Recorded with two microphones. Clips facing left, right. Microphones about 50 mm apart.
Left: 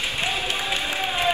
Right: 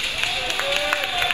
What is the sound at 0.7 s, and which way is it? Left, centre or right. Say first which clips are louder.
Crowd: right 3 dB; right.